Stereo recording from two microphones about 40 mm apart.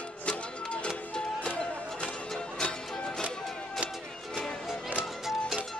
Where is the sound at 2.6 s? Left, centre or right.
Centre.